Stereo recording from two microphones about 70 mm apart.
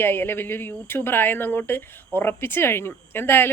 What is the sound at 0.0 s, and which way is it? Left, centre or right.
Speech, left.